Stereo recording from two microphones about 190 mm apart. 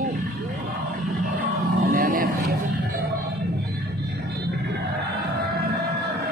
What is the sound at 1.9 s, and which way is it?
Vehicle, 50° right (ahead or behind).